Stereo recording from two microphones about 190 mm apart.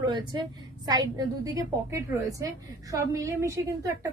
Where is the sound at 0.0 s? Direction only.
25° right (ahead or behind).